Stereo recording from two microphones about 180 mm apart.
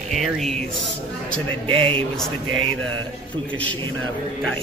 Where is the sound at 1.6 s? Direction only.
30° right (ahead or behind).